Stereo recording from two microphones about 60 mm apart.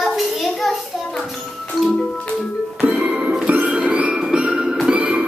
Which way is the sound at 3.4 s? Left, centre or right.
Right.